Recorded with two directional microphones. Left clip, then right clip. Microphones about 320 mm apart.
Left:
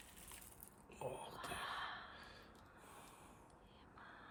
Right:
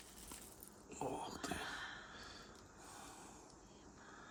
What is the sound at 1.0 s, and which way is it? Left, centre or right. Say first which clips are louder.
Whispering: right 4 dB; right.